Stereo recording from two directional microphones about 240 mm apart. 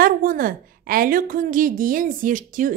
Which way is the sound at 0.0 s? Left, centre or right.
Right.